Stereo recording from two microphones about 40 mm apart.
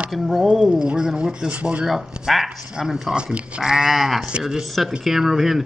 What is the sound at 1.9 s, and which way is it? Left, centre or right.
Speech, centre.